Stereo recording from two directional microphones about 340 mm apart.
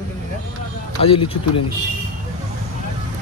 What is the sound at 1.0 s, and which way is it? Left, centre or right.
Speech, centre.